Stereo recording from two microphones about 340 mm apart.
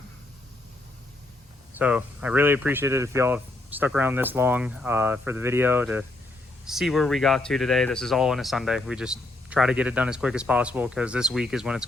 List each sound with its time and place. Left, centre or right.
1.8 s speech: centre